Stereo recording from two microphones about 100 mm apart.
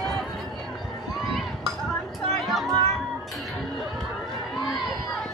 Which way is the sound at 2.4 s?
Centre (ahead or behind).